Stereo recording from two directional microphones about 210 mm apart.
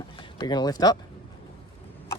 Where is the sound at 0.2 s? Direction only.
20° left (ahead or behind).